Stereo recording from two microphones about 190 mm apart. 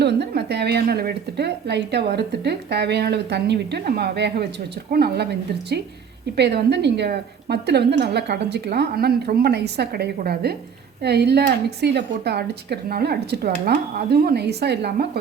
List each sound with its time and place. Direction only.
0.0 s speech: 60° right (ahead or behind)